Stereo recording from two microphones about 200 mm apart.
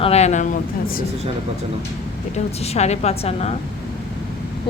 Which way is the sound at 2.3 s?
35° left (ahead or behind).